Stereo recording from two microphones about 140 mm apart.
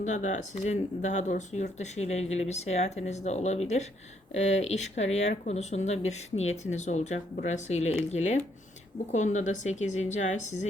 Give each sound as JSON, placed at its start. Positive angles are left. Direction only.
{"t": 0.0, "sound": "a woman's voice", "side_deg": 60}